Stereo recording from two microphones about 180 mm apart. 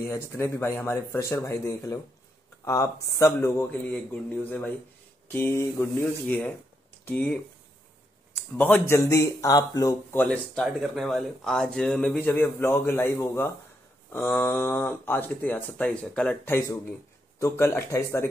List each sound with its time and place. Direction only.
0.0 s speech: 15° left (ahead or behind)
8.5 s speech: 10° left (ahead or behind)
10.2 s speech: 5° left (ahead or behind)